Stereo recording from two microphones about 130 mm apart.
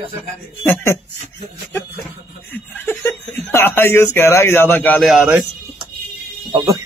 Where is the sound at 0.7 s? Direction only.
15° left (ahead or behind).